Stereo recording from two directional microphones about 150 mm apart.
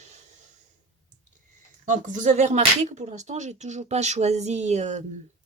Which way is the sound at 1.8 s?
55° right (ahead or behind).